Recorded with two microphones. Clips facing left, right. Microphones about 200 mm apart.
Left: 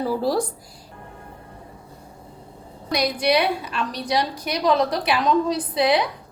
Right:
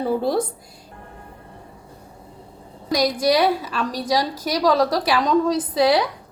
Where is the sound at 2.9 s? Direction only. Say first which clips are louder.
Right 2 dB; 40° right (ahead or behind).